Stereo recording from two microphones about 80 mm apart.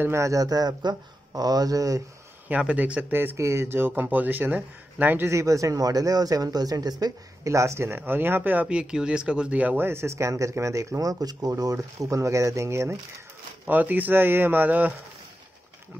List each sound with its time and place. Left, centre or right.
0.0 s speech: right
2.4 s speech: centre
5.3 s speech: right
7.4 s speech: right
13.7 s speech: right